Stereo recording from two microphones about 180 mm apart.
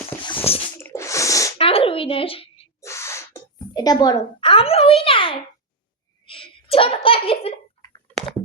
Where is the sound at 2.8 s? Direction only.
15° left (ahead or behind).